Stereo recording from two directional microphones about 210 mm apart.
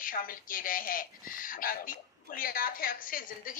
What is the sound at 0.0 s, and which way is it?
A woman's voice, 40° left (ahead or behind).